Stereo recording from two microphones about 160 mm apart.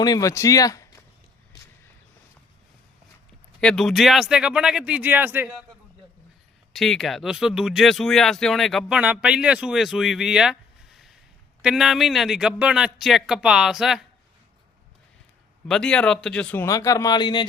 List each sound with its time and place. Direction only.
0.0 s speech: 20° left (ahead or behind)
3.6 s speech: 5° left (ahead or behind)
6.7 s speech: centre (ahead or behind)
15.6 s speech: 5° left (ahead or behind)
16.6 s speech: 20° left (ahead or behind)